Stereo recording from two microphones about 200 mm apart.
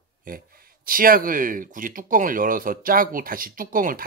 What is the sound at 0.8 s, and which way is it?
Speech, 45° right (ahead or behind).